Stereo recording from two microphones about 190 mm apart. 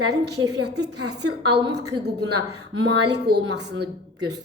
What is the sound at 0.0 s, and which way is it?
A woman's voice, 60° right (ahead or behind).